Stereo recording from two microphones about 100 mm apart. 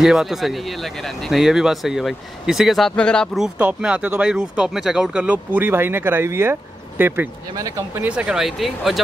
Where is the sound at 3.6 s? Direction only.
10° right (ahead or behind); by 8.0 s 30° right (ahead or behind).